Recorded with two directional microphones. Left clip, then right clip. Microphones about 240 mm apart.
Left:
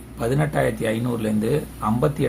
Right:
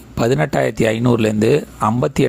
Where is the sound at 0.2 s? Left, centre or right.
Right.